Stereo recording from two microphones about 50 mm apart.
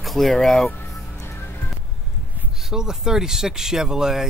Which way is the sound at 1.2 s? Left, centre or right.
Left.